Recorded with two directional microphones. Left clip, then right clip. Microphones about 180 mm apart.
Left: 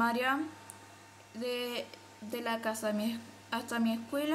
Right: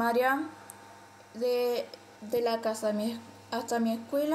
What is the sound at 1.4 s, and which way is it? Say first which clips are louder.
Speech: right 8 dB; 25° left (ahead or behind).